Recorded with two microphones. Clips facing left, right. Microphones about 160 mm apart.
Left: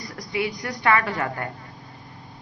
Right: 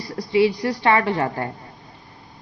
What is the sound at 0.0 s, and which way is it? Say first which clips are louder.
A woman's voice: right 9 dB; 30° right (ahead or behind).